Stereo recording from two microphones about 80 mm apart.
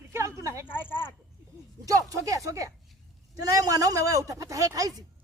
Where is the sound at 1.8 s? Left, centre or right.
Right.